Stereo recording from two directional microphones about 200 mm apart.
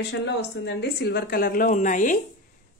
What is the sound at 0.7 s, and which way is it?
Speech, 60° left (ahead or behind).